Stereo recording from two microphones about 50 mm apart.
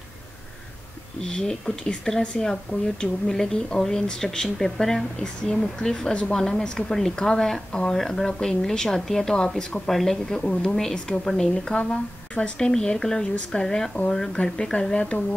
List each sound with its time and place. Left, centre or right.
1.2 s a woman's voice: centre